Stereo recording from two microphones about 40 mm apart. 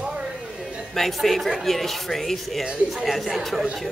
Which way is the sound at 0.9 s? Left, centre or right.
Centre.